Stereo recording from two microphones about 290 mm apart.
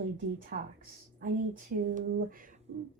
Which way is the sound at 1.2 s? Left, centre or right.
Right.